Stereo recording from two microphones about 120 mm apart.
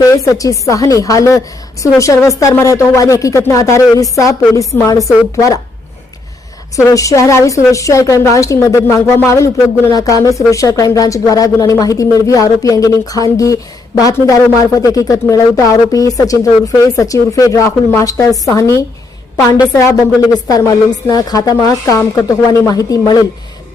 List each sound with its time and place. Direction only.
0.0 s a woman's voice: 30° left (ahead or behind)
6.8 s a woman's voice: 25° left (ahead or behind)
21.1 s a woman's voice: 30° left (ahead or behind)